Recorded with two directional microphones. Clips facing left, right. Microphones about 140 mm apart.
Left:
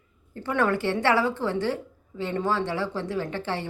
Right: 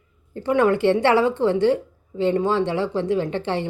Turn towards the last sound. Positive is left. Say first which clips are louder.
# right 6 dB
turn(degrees=-20)  # may be behind; listen again after turning